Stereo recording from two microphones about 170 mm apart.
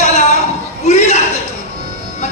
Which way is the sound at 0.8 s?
40° left (ahead or behind).